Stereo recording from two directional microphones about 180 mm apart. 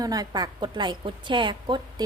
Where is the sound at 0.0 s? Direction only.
20° right (ahead or behind).